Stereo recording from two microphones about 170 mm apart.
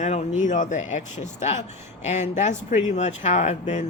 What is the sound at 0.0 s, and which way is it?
Speech, 45° left (ahead or behind).